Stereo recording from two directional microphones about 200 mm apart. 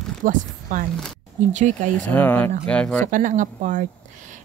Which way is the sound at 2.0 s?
10° left (ahead or behind).